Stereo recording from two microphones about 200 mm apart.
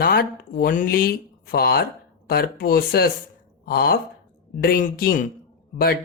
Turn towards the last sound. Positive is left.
turn(degrees=50)  # may be behind; listen again after turning